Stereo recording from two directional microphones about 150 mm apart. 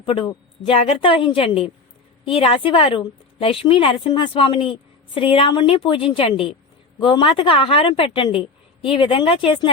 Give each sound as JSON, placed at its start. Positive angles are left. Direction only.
{"t": 0.0, "sound": "a woman's voice", "side_deg": 35}